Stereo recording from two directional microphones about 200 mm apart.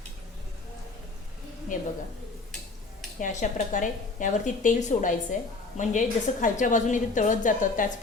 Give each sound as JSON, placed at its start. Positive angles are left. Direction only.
{"t": 1.7, "sound": "a woman's voice", "side_deg": 40}
{"t": 3.2, "sound": "a woman's voice", "side_deg": 40}